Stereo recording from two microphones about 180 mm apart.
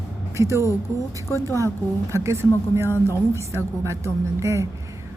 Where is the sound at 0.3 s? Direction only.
15° right (ahead or behind).